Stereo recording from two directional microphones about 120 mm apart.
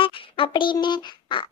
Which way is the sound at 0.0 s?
45° left (ahead or behind).